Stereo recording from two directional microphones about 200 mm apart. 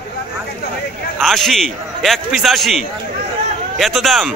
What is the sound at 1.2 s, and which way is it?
A man's voice, centre (ahead or behind).